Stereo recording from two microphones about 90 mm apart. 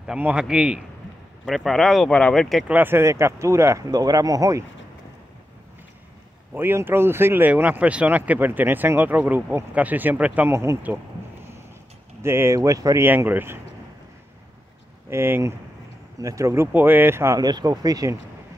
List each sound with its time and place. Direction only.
0.2 s speech: 10° right (ahead or behind)
1.4 s speech: centre (ahead or behind)
2.7 s speech: 25° right (ahead or behind)
3.9 s speech: 45° right (ahead or behind)
6.5 s speech: 25° right (ahead or behind)
10.5 s speech: 30° right (ahead or behind)
12.2 s speech: 30° right (ahead or behind)
12.5 s speech: 40° right (ahead or behind)
13.0 s speech: 25° right (ahead or behind)
15.0 s speech: 25° right (ahead or behind)
16.2 s speech: 40° right (ahead or behind)
16.7 s speech: 20° right (ahead or behind)
17.4 s speech: 50° right (ahead or behind)